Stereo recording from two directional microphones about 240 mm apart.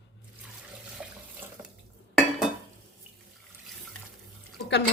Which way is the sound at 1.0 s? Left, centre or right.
Centre.